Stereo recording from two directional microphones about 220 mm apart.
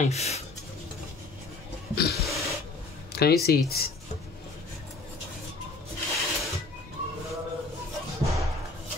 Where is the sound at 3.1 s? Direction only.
45° left (ahead or behind).